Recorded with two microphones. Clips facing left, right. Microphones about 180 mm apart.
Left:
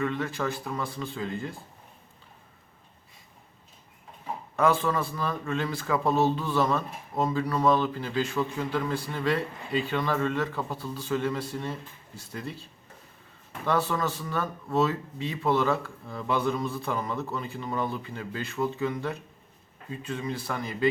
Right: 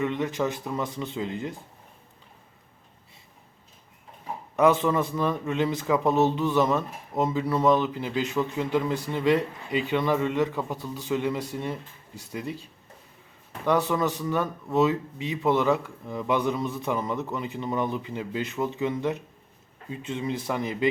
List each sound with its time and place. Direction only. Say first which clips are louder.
0.0 s speech: right 3 dB; 20° right (ahead or behind)
4.5 s a man's voice: right 4 dB; 20° right (ahead or behind)
13.7 s a man's voice: right 3 dB; 15° right (ahead or behind)